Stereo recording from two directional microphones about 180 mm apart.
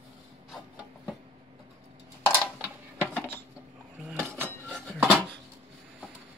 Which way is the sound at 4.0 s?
5° right (ahead or behind).